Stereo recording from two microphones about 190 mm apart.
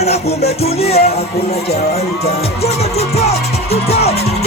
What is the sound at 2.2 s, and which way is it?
Music, 35° left (ahead or behind).